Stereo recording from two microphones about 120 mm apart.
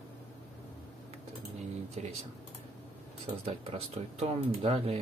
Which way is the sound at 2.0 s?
65° right (ahead or behind).